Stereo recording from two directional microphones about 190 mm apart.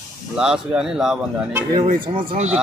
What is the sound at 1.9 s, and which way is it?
Speech, 25° right (ahead or behind).